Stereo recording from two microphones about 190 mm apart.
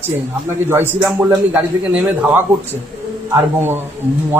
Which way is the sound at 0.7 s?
10° right (ahead or behind).